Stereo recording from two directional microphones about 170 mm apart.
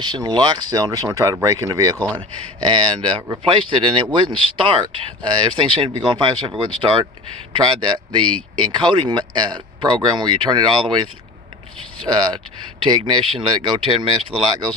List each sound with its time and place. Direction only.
0.0 s speech: 25° right (ahead or behind)
12.1 s speech: 25° right (ahead or behind)